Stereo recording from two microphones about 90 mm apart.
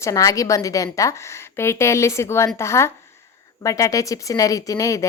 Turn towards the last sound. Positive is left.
turn(degrees=35)  # may be behind; listen again after turning